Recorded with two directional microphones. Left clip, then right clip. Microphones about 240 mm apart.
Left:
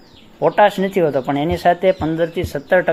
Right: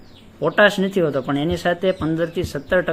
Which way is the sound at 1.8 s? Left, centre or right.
Centre.